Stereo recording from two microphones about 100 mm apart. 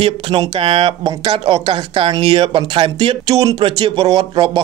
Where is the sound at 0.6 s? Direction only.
70° right (ahead or behind).